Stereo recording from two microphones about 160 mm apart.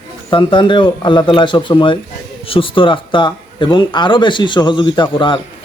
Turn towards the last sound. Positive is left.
turn(degrees=30)  # may be behind; listen again after turning